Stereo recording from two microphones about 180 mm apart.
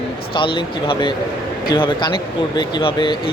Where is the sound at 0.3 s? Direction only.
30° left (ahead or behind).